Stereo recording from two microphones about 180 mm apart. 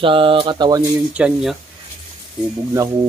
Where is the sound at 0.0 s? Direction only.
30° right (ahead or behind).